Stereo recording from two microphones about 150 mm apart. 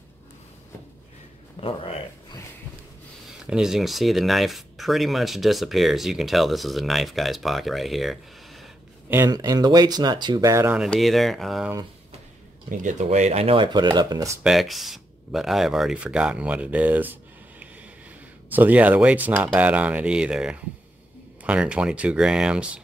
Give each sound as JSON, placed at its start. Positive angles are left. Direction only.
{"t": 1.6, "sound": "speech", "side_deg": 35}
{"t": 3.4, "sound": "speech", "side_deg": -5}
{"t": 9.1, "sound": "speech", "side_deg": -20}
{"t": 10.8, "sound": "speech", "side_deg": 0}
{"t": 12.6, "sound": "speech", "side_deg": -60}
{"t": 14.4, "sound": "speech", "side_deg": 0}